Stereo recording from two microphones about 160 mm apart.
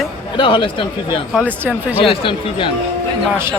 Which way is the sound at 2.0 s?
35° left (ahead or behind).